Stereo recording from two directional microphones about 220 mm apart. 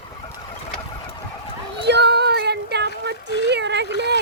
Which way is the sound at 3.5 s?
50° right (ahead or behind).